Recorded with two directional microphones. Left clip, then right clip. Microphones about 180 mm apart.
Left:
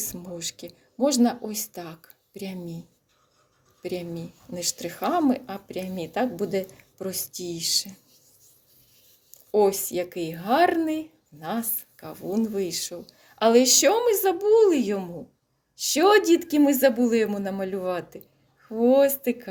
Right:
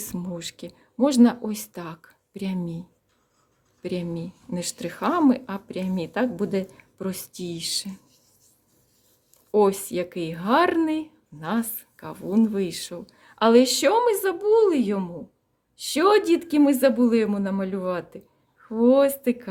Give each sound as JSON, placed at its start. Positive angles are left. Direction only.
{"t": 0.0, "sound": "speech", "side_deg": -30}
{"t": 3.8, "sound": "speech", "side_deg": -30}
{"t": 9.5, "sound": "speech", "side_deg": -25}